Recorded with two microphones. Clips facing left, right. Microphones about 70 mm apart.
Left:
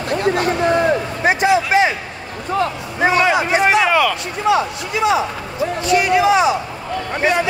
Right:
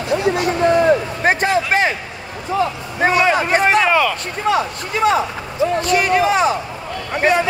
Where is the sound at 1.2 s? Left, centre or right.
Right.